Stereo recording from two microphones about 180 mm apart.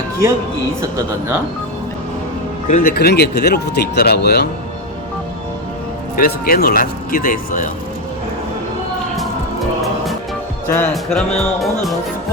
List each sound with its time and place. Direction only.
0.8 s speech: 15° right (ahead or behind)
2.6 s speech: 50° left (ahead or behind); by 4.4 s 65° left (ahead or behind)
6.1 s speech: 55° left (ahead or behind)
10.8 s speech: 5° left (ahead or behind)